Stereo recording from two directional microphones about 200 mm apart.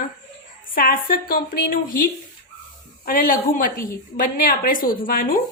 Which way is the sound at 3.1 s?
45° left (ahead or behind).